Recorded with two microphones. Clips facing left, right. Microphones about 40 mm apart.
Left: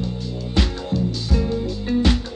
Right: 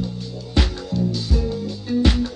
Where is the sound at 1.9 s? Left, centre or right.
Centre.